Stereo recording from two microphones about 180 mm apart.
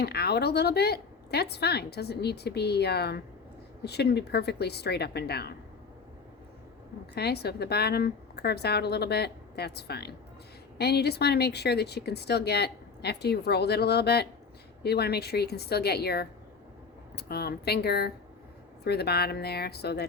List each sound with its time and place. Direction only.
0.0 s speech: 60° left (ahead or behind)
7.2 s speech: 65° left (ahead or behind)